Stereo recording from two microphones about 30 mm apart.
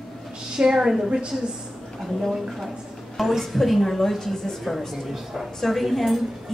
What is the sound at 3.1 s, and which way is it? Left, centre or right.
A woman's voice, centre.